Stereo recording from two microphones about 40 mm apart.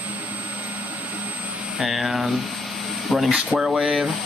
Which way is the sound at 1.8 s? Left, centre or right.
Centre.